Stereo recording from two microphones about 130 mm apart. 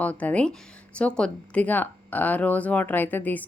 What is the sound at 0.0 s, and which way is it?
Speech, 10° left (ahead or behind).